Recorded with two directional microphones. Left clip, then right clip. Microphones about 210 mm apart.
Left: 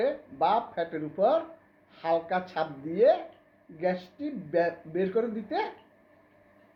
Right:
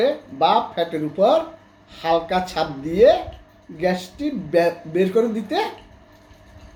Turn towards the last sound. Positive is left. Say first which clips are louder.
# right 9 dB
turn(degrees=-10)  # may be behind; listen again after turning